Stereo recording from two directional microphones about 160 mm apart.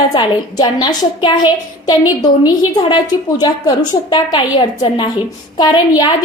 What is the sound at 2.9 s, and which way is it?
A woman's voice, 25° left (ahead or behind).